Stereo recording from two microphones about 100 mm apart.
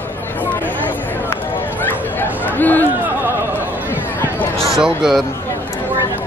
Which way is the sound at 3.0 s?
20° right (ahead or behind).